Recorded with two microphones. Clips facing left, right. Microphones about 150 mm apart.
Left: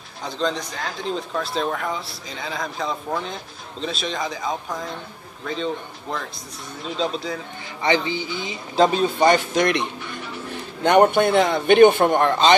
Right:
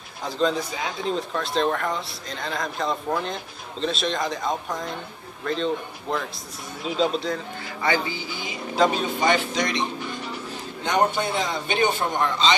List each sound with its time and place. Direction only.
0.2 s speech: 5° right (ahead or behind)
7.8 s a man's voice: 20° left (ahead or behind)
9.5 s a man's voice: 55° left (ahead or behind)